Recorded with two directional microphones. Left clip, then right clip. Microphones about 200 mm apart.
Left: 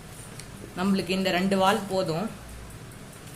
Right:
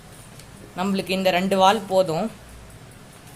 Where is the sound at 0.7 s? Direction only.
25° right (ahead or behind).